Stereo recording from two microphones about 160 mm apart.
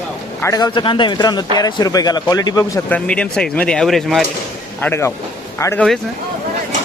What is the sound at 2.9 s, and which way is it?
Speech, 5° left (ahead or behind).